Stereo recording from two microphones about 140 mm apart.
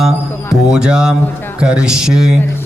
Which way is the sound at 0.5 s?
5° right (ahead or behind).